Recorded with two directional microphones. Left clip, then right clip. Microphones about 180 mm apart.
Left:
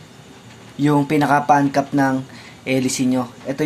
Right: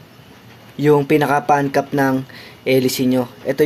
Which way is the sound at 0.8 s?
35° right (ahead or behind).